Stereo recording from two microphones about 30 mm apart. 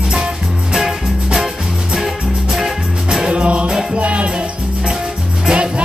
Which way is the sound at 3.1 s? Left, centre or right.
Right.